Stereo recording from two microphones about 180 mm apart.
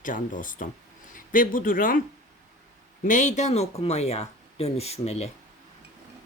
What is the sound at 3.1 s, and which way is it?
Speech, 40° left (ahead or behind).